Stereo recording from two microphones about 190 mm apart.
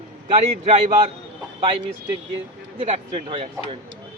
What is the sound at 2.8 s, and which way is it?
Speech, 30° right (ahead or behind).